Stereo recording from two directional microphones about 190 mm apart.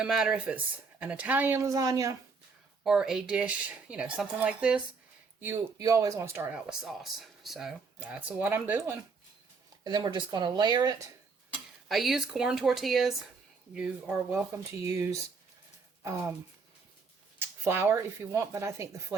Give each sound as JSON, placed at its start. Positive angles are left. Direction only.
{"t": 0.0, "sound": "speech", "side_deg": -5}
{"t": 2.8, "sound": "speech", "side_deg": -5}
{"t": 9.8, "sound": "speech", "side_deg": -25}
{"t": 11.9, "sound": "speech", "side_deg": 0}
{"t": 14.8, "sound": "speech", "side_deg": -15}
{"t": 17.6, "sound": "speech", "side_deg": -10}